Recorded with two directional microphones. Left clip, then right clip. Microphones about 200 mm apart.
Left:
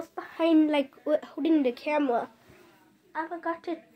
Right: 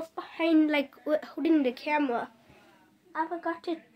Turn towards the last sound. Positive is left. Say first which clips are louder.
# even
turn(degrees=0)  # may be behind; listen again after turning